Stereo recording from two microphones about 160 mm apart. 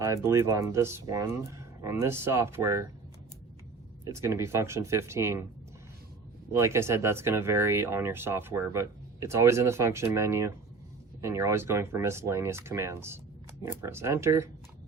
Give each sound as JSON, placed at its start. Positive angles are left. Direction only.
{"t": 0.0, "sound": "speech", "side_deg": -20}
{"t": 4.0, "sound": "speech", "side_deg": -15}
{"t": 6.5, "sound": "speech", "side_deg": -15}